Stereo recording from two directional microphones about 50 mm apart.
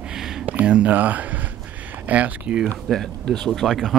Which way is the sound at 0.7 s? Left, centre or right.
Right.